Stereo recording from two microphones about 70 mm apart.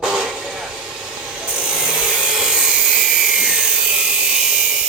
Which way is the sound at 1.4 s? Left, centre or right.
Centre.